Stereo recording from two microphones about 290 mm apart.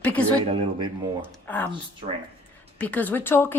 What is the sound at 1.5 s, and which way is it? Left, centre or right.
Speech, centre.